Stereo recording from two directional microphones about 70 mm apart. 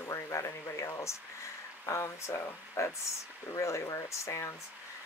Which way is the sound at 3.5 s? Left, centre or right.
Left.